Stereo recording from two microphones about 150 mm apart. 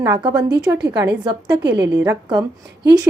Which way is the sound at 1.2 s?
30° right (ahead or behind).